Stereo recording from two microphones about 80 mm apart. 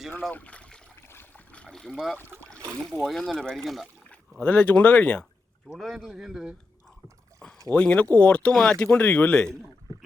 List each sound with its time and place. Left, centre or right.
0.3 s speech: centre
1.0 s a sound: left
1.5 s speech: centre
4.1 s speech: centre
5.6 s speech: centre
7.7 s speech: centre